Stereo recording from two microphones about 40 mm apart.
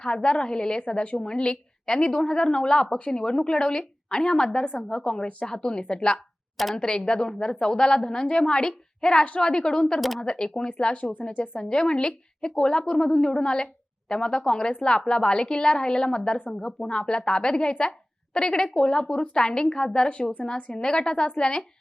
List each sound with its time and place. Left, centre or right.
0.0 s a woman's voice: left
11.6 s a woman's voice: centre